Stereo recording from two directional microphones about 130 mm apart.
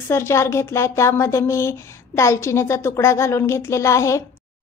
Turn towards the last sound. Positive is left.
turn(degrees=25)  # may be behind; listen again after turning